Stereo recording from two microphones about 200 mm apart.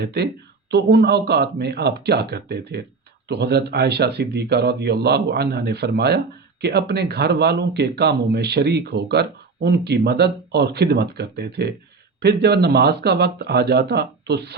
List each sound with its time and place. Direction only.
0.0 s speech: 55° right (ahead or behind)